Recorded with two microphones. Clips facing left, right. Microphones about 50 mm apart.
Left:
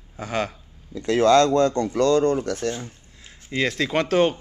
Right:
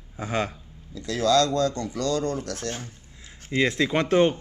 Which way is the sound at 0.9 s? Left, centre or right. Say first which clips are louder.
Left 5 dB; left.